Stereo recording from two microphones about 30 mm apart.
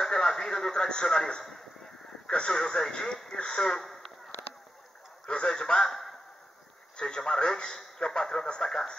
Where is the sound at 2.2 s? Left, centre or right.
Left.